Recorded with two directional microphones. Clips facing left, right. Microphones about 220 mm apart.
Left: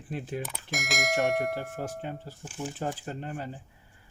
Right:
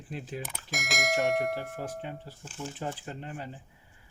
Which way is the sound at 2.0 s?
45° left (ahead or behind).